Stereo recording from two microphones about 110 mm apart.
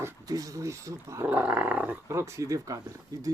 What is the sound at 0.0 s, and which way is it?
Speech, 30° right (ahead or behind).